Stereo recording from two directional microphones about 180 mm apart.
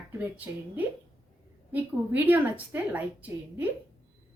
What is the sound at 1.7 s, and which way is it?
A woman's voice, 10° right (ahead or behind).